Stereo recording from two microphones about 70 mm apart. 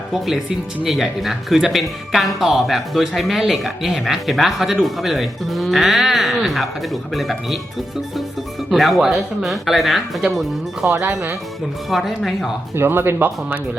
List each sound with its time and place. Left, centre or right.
0.9 s speech: centre
8.7 s speech: centre
10.9 s speech: right
11.9 s speech: centre
12.7 s speech: right